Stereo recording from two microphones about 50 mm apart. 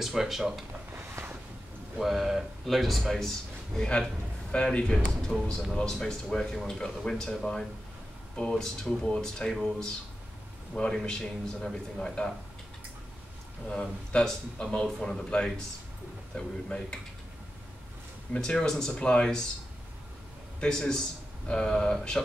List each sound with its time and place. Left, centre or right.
0.0 s speech: centre
2.0 s speech: centre
13.7 s speech: centre
18.3 s speech: centre
20.6 s speech: centre